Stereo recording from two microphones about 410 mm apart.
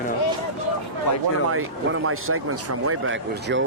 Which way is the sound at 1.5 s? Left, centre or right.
Right.